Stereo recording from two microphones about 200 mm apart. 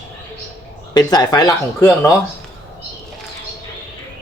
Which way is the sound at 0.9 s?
20° left (ahead or behind).